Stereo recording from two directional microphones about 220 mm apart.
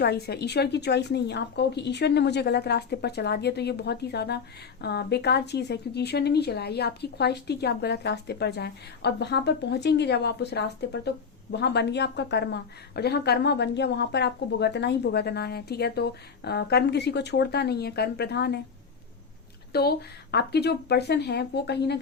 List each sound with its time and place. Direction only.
0.0 s a woman's voice: 50° left (ahead or behind)
19.7 s a woman's voice: 45° left (ahead or behind)